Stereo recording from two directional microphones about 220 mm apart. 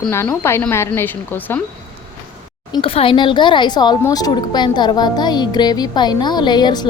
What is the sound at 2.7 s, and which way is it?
A woman's voice, 25° left (ahead or behind).